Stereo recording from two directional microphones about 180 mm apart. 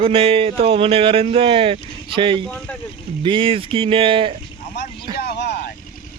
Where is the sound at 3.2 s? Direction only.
30° right (ahead or behind).